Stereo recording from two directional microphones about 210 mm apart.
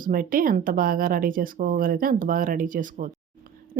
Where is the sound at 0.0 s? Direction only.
40° right (ahead or behind).